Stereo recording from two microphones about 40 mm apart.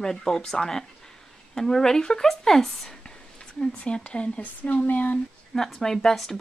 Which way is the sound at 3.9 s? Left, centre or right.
Left.